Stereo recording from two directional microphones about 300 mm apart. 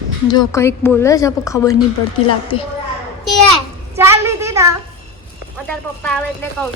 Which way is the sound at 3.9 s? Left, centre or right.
Centre.